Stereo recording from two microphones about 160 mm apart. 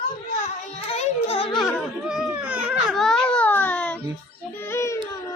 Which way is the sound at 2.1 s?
5° right (ahead or behind).